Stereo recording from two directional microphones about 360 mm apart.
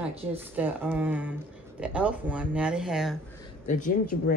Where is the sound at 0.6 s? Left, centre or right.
Centre.